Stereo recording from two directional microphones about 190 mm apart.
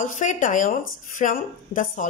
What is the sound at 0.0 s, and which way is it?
Speech, 40° left (ahead or behind).